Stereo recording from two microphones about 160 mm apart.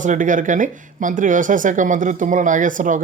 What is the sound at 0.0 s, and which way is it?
Speech, 55° right (ahead or behind).